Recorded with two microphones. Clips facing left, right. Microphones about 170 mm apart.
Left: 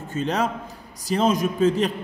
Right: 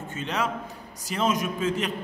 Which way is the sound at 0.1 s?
40° left (ahead or behind).